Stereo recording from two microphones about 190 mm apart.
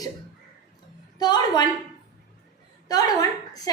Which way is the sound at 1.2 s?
20° left (ahead or behind).